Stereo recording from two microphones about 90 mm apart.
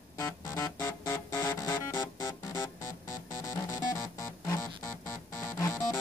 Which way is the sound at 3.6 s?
30° left (ahead or behind).